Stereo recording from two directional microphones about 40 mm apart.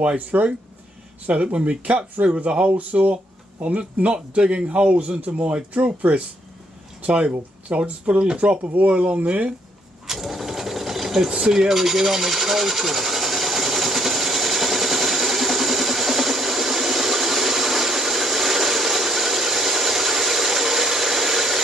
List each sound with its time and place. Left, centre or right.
0.0 s a man's voice: right
2.9 s a man's voice: right
7.0 s a sound: right
7.7 s a man's voice: right
10.0 s sewing machine: centre